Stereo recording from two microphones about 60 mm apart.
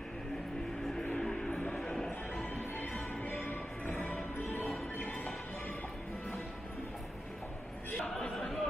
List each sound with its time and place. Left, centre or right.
1.1 s music: centre
2.3 s music: left
8.2 s chatter: centre